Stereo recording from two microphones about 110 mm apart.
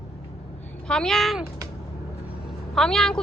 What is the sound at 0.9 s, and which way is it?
Speech, 5° left (ahead or behind).